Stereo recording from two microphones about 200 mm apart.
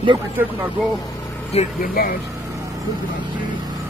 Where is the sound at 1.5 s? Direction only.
30° left (ahead or behind).